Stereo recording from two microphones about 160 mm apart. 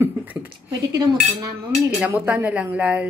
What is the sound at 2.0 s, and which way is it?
A woman's voice, 10° right (ahead or behind).